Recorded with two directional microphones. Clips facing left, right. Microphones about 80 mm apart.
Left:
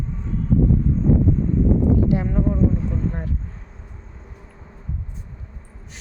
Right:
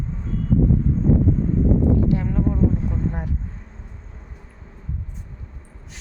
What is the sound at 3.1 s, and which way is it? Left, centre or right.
Speech, centre.